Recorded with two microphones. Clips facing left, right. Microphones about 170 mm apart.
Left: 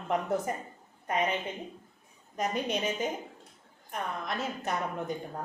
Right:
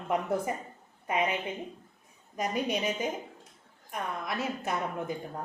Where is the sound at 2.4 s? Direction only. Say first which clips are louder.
Even; 5° right (ahead or behind).